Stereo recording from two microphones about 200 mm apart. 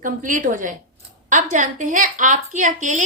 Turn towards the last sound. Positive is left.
turn(degrees=-40)  # may be behind; listen again after turning